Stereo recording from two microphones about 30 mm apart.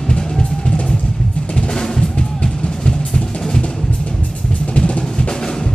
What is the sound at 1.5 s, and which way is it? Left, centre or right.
Drum, centre.